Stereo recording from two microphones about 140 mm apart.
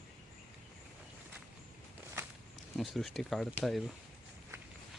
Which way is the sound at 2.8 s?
Centre (ahead or behind).